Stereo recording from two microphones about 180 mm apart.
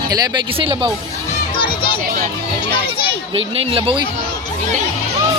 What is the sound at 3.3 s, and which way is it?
Speech, 30° right (ahead or behind).